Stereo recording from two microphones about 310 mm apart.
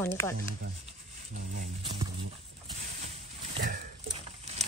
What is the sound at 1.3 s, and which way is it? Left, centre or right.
Speech, right.